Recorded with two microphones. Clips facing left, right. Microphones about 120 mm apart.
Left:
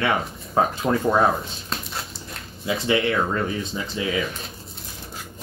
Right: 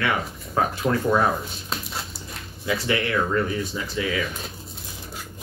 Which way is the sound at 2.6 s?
25° left (ahead or behind).